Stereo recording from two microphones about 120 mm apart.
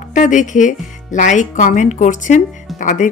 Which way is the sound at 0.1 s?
90° left.